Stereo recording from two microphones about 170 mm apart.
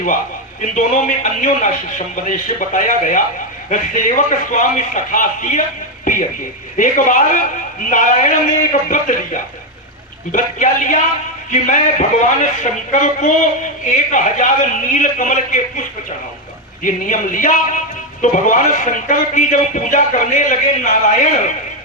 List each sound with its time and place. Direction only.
0.6 s speech: 50° left (ahead or behind)
6.7 s speech: 50° left (ahead or behind)